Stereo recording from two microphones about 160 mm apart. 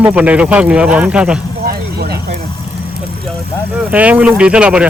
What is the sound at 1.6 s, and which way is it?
Vehicle, 75° right (ahead or behind).